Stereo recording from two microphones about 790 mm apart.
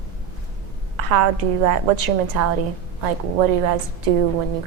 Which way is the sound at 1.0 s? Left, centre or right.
Right.